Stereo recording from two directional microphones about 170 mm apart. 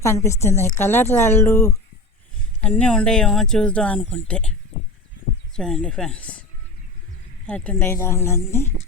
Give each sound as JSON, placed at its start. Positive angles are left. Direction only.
{"t": 0.0, "sound": "speech", "side_deg": 15}
{"t": 5.5, "sound": "speech", "side_deg": 5}
{"t": 7.4, "sound": "speech", "side_deg": 10}